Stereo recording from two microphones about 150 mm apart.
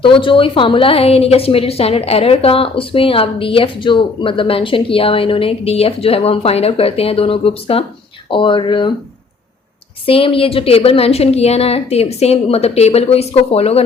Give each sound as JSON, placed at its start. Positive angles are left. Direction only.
{"t": 0.0, "sound": "a woman's voice", "side_deg": 35}
{"t": 10.1, "sound": "a woman's voice", "side_deg": 35}